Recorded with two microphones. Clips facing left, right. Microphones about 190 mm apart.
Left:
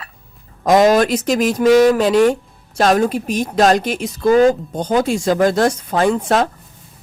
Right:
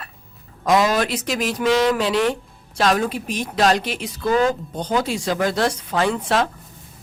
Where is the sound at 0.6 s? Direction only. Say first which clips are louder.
Left 6 dB; 45° left (ahead or behind).